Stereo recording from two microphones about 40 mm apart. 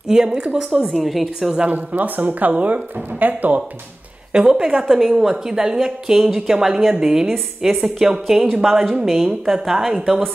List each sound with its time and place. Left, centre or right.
0.1 s a woman's voice: centre
1.0 s a woman's voice: centre
1.7 s speech: right
4.3 s speech: centre
7.2 s a woman's voice: centre
8.0 s a woman's voice: centre